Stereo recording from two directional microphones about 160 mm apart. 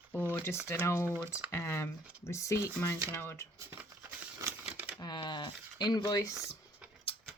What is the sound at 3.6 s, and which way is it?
Crumpling, 15° right (ahead or behind).